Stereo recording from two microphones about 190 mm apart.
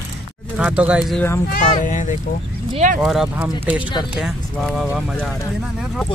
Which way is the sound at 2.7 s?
40° right (ahead or behind).